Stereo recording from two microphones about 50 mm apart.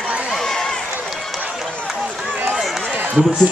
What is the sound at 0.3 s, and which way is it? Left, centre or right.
Run, centre.